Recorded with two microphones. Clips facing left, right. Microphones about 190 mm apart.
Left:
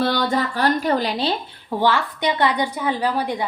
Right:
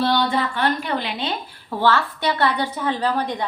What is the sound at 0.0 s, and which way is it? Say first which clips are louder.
Speech: even; 45° left (ahead or behind).